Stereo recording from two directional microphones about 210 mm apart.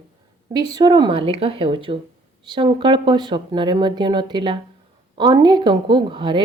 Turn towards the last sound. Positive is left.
turn(degrees=-20)  # may be behind; listen again after turning